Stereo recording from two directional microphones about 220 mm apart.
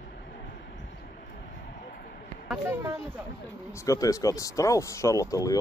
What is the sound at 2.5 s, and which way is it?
Speech, 10° right (ahead or behind).